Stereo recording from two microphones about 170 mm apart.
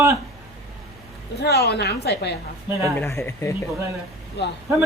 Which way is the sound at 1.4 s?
75° left (ahead or behind).